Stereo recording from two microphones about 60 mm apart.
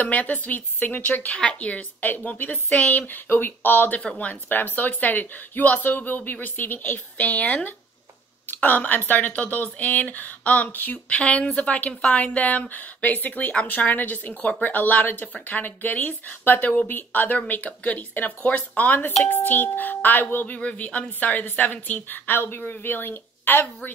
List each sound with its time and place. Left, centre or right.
0.0 s speech: left
14.3 s speech: centre
14.6 s a woman's voice: left